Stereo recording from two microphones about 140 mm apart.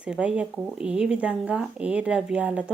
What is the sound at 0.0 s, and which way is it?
Speech, 5° right (ahead or behind).